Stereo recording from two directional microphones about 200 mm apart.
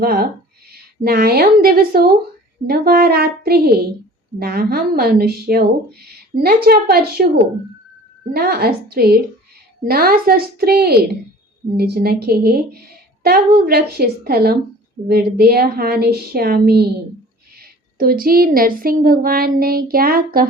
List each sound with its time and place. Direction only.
0.0 s a woman's voice: 50° right (ahead or behind)
8.3 s speech: 50° right (ahead or behind)
17.9 s speech: 45° right (ahead or behind)